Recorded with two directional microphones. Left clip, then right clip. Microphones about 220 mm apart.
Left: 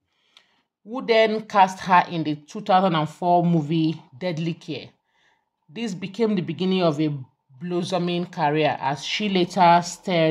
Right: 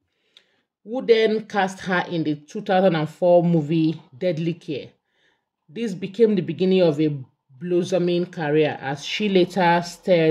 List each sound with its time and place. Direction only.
0.8 s speech: 5° left (ahead or behind)